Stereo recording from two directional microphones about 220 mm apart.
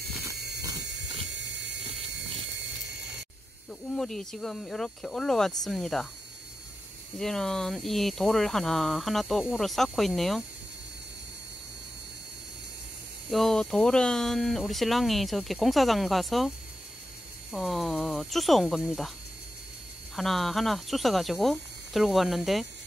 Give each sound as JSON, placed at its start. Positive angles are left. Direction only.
{"t": 1.3, "sound": "a sound", "side_deg": -55}
{"t": 3.9, "sound": "speech", "side_deg": 0}
{"t": 7.2, "sound": "speech", "side_deg": 0}
{"t": 13.3, "sound": "speech", "side_deg": 0}
{"t": 20.2, "sound": "speech", "side_deg": 0}